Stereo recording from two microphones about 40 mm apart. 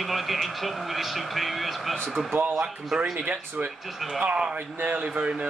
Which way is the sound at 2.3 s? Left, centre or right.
Right.